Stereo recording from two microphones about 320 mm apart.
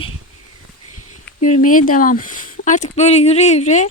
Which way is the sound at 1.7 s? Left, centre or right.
Left.